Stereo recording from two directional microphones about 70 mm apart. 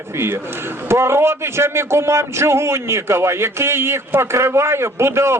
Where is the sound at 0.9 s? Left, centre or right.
Right.